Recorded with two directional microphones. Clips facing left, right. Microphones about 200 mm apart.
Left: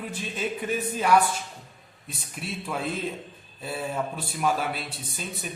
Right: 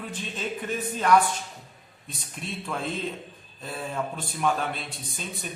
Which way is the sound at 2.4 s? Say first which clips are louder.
Left 1 dB; 5° left (ahead or behind).